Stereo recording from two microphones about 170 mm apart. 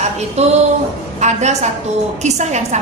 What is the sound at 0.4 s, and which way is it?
A woman's voice, 40° right (ahead or behind).